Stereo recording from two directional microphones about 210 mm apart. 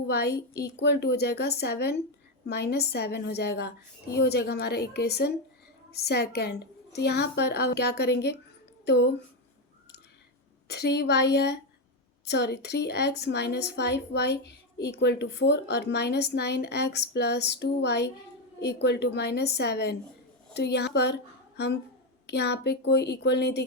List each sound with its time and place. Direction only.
0.1 s speech: 50° left (ahead or behind)
10.7 s speech: 55° left (ahead or behind)